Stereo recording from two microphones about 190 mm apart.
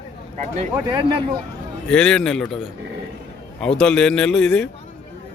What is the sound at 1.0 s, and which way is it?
Speech, 25° right (ahead or behind).